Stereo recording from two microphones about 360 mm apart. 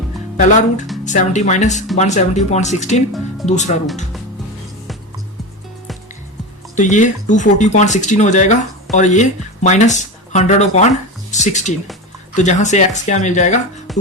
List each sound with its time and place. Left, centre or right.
0.3 s speech: left
6.7 s speech: centre
13.9 s music: centre